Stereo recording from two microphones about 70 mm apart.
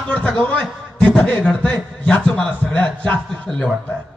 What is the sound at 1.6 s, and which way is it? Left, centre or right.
Speech, centre.